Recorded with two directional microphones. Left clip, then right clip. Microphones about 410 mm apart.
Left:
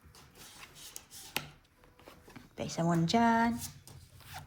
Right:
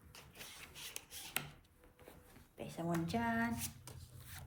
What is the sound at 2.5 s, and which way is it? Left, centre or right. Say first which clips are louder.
Speech: left 8 dB; left.